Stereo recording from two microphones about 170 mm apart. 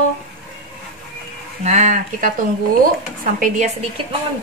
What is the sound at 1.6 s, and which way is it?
Speech, 45° right (ahead or behind).